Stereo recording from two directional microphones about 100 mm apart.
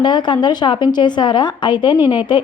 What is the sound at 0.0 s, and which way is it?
A woman's voice, 50° left (ahead or behind).